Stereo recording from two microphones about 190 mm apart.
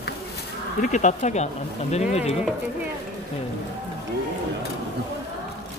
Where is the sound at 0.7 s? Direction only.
40° left (ahead or behind).